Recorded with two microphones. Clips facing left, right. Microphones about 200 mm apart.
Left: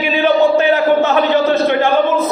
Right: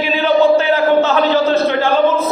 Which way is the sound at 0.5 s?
20° left (ahead or behind).